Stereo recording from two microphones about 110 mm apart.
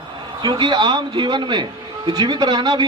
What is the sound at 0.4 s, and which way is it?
A man's voice, 45° right (ahead or behind).